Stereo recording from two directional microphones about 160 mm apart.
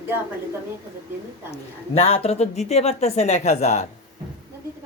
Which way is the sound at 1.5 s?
40° left (ahead or behind).